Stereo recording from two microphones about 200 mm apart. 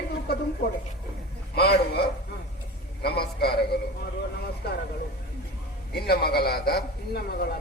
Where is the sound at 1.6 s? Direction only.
55° left (ahead or behind).